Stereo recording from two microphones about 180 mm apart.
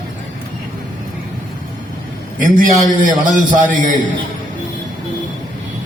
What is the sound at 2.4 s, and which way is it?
A man's voice, 50° right (ahead or behind).